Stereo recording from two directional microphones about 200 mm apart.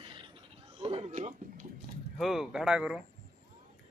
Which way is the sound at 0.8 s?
30° right (ahead or behind).